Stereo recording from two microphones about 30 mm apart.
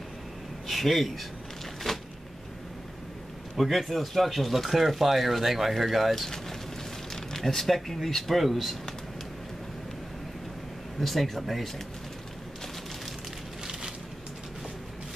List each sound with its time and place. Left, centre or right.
0.7 s speech: centre
1.8 s a sound: centre
3.5 s speech: centre
7.3 s speech: centre
11.0 s speech: centre